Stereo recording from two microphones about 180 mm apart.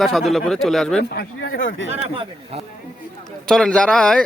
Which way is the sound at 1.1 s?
75° left (ahead or behind).